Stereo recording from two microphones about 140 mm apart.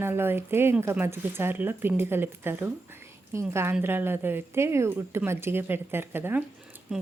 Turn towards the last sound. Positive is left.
turn(degrees=-5)  # may be behind; listen again after turning